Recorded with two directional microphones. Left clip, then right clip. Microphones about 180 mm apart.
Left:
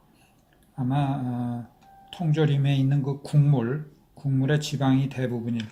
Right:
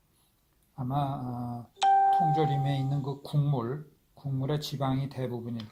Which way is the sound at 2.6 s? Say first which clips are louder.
Left 5 dB; 15° right (ahead or behind).